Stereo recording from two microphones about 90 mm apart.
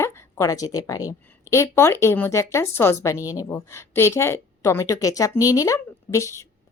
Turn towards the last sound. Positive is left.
turn(degrees=35)  # may be behind; listen again after turning